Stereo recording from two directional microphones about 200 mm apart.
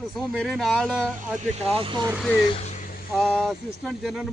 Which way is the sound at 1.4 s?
35° right (ahead or behind).